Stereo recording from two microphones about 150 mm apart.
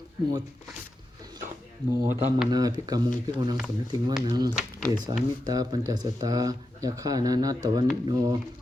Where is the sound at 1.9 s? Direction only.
15° right (ahead or behind).